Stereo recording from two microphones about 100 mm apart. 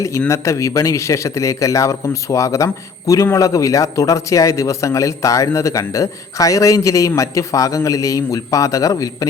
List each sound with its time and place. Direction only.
0.3 s a man's voice: 30° left (ahead or behind)